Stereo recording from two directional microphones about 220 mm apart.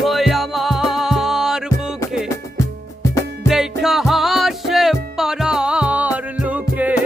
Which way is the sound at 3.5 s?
Centre (ahead or behind).